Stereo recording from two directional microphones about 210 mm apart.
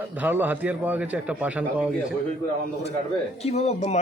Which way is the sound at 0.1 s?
10° right (ahead or behind).